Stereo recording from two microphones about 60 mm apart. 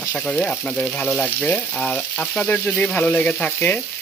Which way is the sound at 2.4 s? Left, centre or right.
Left.